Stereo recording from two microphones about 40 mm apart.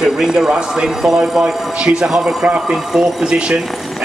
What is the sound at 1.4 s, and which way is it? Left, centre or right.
Speech, right.